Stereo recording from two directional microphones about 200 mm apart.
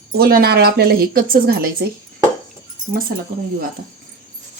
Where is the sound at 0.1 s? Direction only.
50° right (ahead or behind).